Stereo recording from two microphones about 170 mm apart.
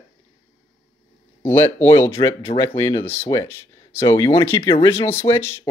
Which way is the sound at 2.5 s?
40° left (ahead or behind).